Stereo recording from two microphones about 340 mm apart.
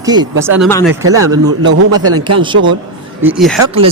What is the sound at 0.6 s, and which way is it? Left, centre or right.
Speech, centre.